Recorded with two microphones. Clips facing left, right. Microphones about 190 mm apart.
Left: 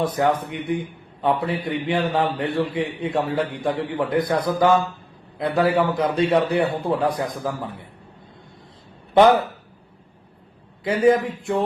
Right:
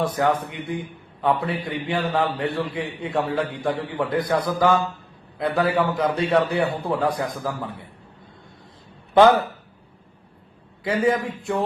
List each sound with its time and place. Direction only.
0.0 s a man's voice: 20° left (ahead or behind)
10.8 s a man's voice: 20° left (ahead or behind)